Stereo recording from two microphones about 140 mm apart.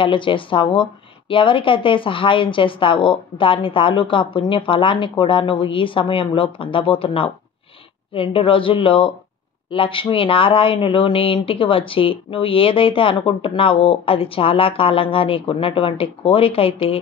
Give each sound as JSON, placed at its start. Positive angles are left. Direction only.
{"t": 0.0, "sound": "speech", "side_deg": 35}